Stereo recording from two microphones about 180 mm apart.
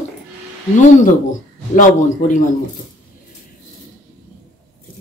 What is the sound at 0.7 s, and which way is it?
A woman's voice, 45° left (ahead or behind).